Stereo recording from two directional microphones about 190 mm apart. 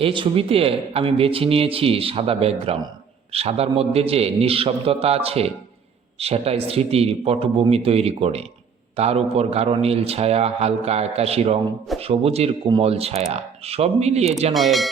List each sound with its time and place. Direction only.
0.0 s a man's voice: 30° right (ahead or behind)
14.5 s speech: centre (ahead or behind)